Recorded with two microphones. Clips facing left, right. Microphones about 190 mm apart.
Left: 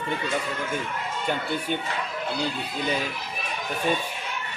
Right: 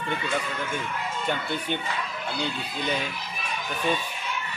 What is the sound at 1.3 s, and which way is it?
Speech, 5° left (ahead or behind).